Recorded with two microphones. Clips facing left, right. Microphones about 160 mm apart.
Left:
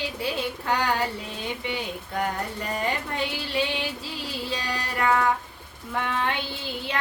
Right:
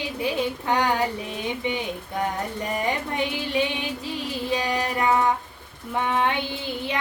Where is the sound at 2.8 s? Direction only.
20° right (ahead or behind).